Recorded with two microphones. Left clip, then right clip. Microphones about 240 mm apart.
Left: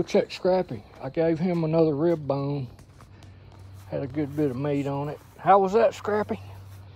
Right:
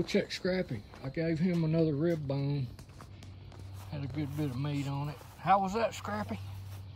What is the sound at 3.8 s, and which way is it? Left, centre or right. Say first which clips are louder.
Speech: left 11 dB; left.